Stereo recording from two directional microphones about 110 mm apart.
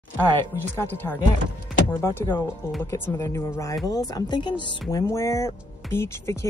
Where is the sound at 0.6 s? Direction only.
20° left (ahead or behind); by 5.0 s 45° left (ahead or behind).